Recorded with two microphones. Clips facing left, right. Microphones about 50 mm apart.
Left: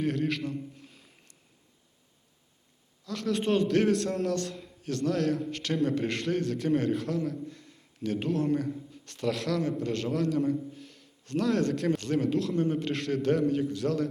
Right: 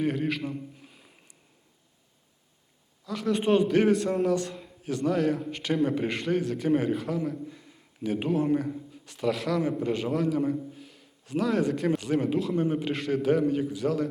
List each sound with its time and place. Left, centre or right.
0.0 s a man's voice: centre
3.1 s a man's voice: centre